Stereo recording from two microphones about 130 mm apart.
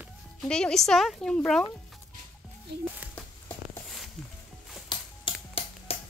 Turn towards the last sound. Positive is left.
turn(degrees=45)  # may be behind; listen again after turning